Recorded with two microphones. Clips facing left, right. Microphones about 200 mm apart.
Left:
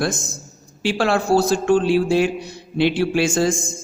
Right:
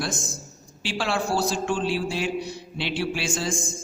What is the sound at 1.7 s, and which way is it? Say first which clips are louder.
A man's voice: left 10 dB; 55° left (ahead or behind).